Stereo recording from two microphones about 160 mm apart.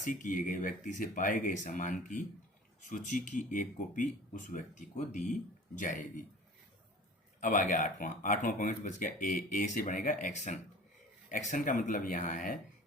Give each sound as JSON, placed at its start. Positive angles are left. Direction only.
{"t": 0.0, "sound": "speech", "side_deg": 55}
{"t": 7.4, "sound": "speech", "side_deg": 55}